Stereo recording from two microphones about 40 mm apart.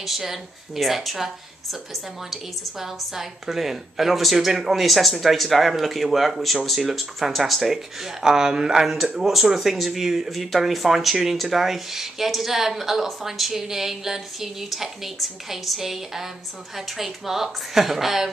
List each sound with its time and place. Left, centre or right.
0.0 s a woman's voice: centre